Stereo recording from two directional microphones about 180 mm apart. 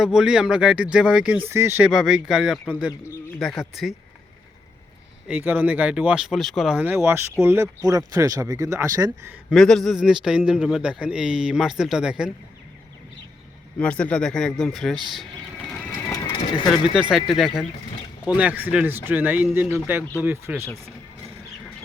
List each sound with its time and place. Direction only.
0.0 s a man's voice: 5° right (ahead or behind)
1.9 s a man's voice: centre (ahead or behind)
5.3 s speech: 10° right (ahead or behind)
9.5 s a man's voice: centre (ahead or behind)
13.7 s a man's voice: 5° left (ahead or behind)
16.0 s horse: 10° left (ahead or behind)
16.9 s a man's voice: 5° right (ahead or behind)